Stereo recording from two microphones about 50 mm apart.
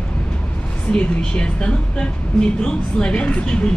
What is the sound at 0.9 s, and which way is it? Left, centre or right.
A woman's voice, left.